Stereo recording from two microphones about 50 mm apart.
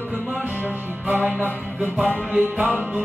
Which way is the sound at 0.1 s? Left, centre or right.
Right.